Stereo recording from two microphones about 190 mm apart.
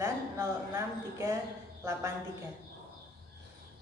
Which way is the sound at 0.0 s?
15° right (ahead or behind).